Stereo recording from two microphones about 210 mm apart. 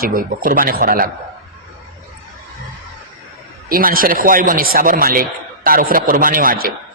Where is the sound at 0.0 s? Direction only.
45° right (ahead or behind).